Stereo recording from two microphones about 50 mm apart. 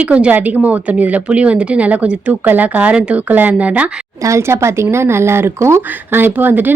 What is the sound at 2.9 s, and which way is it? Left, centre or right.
Speech, right.